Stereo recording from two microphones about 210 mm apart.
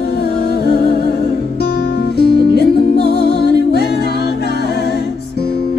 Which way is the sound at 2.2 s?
50° right (ahead or behind).